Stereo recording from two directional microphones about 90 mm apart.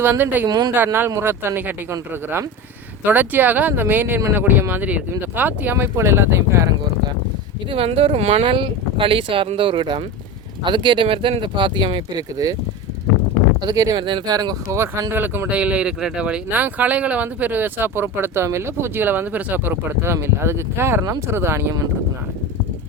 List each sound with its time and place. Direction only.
0.0 s speech: 20° right (ahead or behind)
0.4 s speech: 45° right (ahead or behind)
0.9 s speech: 25° right (ahead or behind)
7.7 s speech: 90° right
10.6 s speech: 60° right (ahead or behind)
13.6 s speech: 45° right (ahead or behind)
13.9 s speech: 65° right (ahead or behind)
14.3 s speech: 45° right (ahead or behind)
15.1 s speech: 20° right (ahead or behind)